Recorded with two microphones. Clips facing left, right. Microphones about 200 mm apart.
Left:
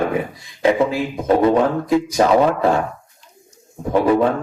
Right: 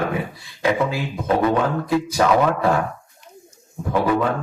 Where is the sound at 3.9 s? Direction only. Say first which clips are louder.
Left 4 dB; 30° left (ahead or behind).